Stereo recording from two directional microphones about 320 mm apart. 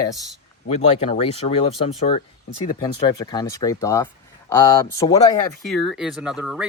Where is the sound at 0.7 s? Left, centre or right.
Centre.